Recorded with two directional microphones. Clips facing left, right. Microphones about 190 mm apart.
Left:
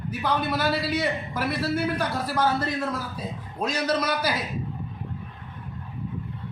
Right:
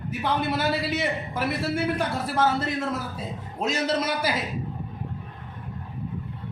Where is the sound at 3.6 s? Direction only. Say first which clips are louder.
Even; 25° right (ahead or behind).